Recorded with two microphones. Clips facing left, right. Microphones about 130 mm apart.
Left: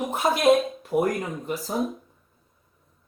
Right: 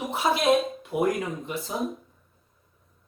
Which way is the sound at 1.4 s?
40° left (ahead or behind).